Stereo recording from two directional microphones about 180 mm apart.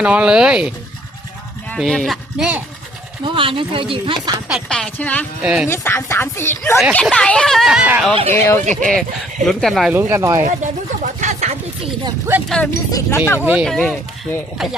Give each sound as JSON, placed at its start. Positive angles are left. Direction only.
{"t": 0.0, "sound": "speech", "side_deg": -5}
{"t": 1.7, "sound": "speech", "side_deg": 5}
{"t": 3.2, "sound": "speech", "side_deg": -30}
{"t": 4.4, "sound": "speech", "side_deg": 0}
{"t": 5.4, "sound": "speech", "side_deg": -5}
{"t": 5.6, "sound": "speech", "side_deg": 15}
{"t": 8.3, "sound": "speech", "side_deg": 15}
{"t": 9.9, "sound": "speech", "side_deg": -15}
{"t": 10.4, "sound": "speech", "side_deg": -45}
{"t": 12.0, "sound": "speech", "side_deg": -15}
{"t": 12.7, "sound": "speech", "side_deg": 15}
{"t": 13.4, "sound": "speech", "side_deg": -10}
{"t": 13.7, "sound": "speech", "side_deg": 5}